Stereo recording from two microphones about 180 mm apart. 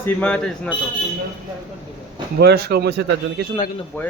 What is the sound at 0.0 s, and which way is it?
Speech, 5° left (ahead or behind).